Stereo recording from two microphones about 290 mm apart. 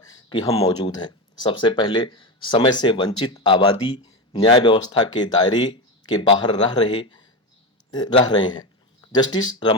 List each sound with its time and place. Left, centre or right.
0.0 s speech: centre